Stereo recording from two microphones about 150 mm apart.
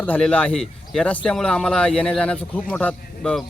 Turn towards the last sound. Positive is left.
turn(degrees=10)  # may be behind; listen again after turning